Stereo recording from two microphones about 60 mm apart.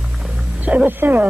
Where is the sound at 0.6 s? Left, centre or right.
Right.